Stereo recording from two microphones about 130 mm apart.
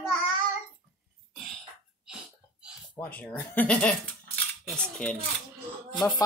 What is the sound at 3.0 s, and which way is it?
A child's voice, 15° left (ahead or behind).